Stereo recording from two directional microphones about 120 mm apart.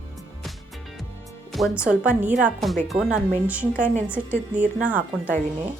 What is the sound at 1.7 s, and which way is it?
Speech, 10° right (ahead or behind).